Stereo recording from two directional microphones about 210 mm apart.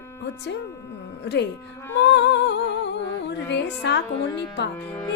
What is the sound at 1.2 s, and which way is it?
Speech, 55° left (ahead or behind).